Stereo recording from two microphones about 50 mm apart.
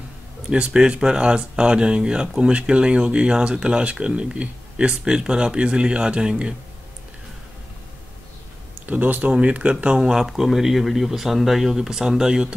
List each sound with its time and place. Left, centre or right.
0.5 s speech: centre
8.8 s speech: right; by 10.2 s centre
10.2 s speech: centre